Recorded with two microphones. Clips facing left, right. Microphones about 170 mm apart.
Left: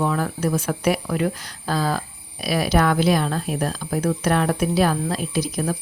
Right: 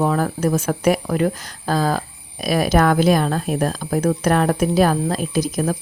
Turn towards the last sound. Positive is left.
turn(degrees=-45)  # may be behind; listen again after turning